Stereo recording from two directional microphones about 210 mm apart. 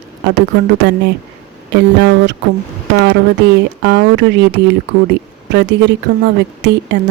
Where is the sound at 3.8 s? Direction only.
55° right (ahead or behind).